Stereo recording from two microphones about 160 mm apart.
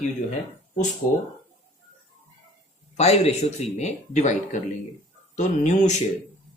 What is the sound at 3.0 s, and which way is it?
Speech, 45° left (ahead or behind).